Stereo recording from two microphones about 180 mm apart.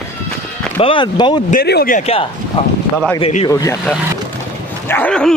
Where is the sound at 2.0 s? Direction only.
35° left (ahead or behind).